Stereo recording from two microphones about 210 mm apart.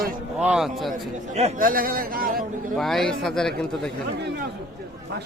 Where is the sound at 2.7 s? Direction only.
Centre (ahead or behind).